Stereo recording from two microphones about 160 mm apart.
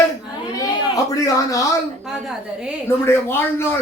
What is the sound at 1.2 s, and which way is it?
Speech, 20° left (ahead or behind).